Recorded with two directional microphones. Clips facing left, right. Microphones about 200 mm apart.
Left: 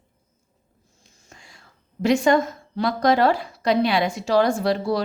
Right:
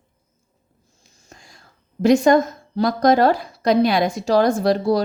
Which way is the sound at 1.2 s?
40° right (ahead or behind).